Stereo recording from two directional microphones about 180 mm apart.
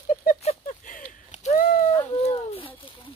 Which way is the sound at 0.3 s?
40° left (ahead or behind).